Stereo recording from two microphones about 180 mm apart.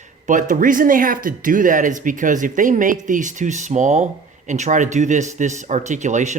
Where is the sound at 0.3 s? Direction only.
45° right (ahead or behind).